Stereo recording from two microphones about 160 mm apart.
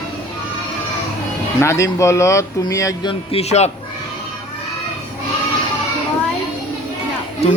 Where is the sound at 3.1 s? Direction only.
40° left (ahead or behind).